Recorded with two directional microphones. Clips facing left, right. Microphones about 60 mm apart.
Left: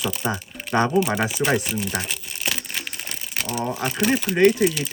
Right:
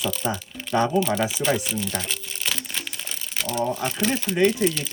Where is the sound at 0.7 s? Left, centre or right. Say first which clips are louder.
Left 1 dB; left.